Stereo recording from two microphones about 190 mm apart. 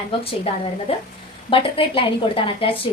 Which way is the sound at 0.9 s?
30° left (ahead or behind).